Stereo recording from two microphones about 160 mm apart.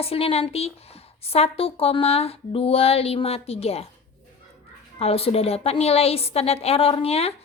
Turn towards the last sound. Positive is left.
turn(degrees=40)  # may be behind; listen again after turning